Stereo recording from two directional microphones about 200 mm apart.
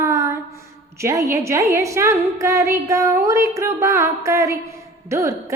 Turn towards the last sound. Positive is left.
turn(degrees=-15)  # may be behind; listen again after turning